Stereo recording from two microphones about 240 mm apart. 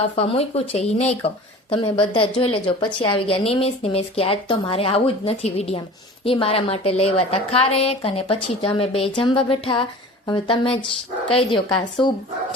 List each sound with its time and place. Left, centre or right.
0.2 s a woman's voice: left
12.0 s speech: centre